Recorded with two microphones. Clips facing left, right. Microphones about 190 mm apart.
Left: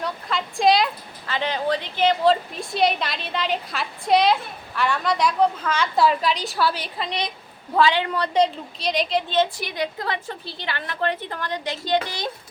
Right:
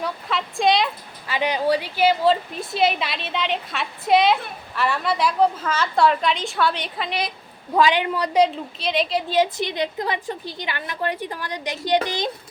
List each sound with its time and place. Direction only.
0.0 s a woman's voice: centre (ahead or behind)
1.3 s a woman's voice: 10° right (ahead or behind)
7.8 s a woman's voice: 15° right (ahead or behind)
8.4 s a woman's voice: 5° right (ahead or behind)
9.6 s a woman's voice: 20° right (ahead or behind)